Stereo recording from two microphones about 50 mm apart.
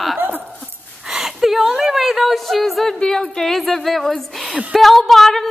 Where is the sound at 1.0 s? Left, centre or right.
Centre.